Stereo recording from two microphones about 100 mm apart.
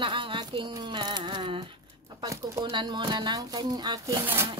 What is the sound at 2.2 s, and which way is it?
Speech, 30° right (ahead or behind).